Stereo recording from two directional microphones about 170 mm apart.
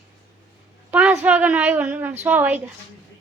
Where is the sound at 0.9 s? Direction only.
10° right (ahead or behind).